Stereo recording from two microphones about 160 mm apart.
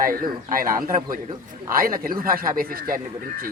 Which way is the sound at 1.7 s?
65° right (ahead or behind).